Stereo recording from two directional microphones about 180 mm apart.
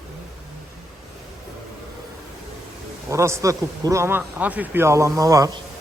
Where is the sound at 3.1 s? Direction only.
15° right (ahead or behind).